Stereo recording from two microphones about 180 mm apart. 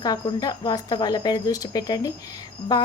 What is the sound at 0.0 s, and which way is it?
A woman's voice, 20° left (ahead or behind).